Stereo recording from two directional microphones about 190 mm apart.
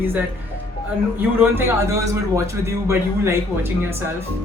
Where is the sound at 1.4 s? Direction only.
10° right (ahead or behind).